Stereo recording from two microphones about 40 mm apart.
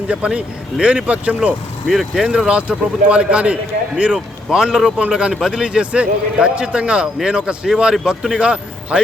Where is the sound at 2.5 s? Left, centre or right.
Right.